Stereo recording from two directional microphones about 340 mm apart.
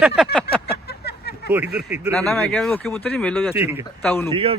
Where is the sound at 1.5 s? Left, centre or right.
Centre.